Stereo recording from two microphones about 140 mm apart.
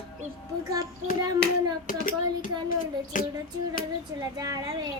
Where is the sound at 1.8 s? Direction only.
70° left (ahead or behind).